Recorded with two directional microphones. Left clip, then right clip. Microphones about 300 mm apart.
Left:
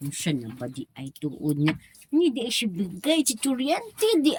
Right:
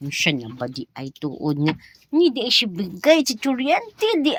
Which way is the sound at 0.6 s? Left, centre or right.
Right.